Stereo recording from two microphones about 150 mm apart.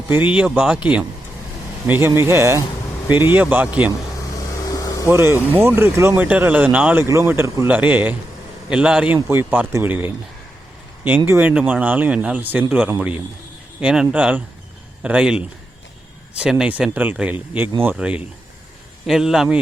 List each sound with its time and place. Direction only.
0.3 s speech: 10° right (ahead or behind)
4.4 s vehicle: 25° left (ahead or behind)
5.0 s a man's voice: 15° right (ahead or behind)
9.1 s speech: 15° right (ahead or behind)
11.3 s a man's voice: 10° right (ahead or behind)